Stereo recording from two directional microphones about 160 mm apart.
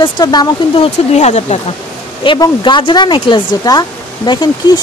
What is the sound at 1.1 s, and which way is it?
Speech, 45° left (ahead or behind).